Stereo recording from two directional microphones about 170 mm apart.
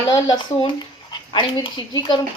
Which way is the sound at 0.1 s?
20° left (ahead or behind).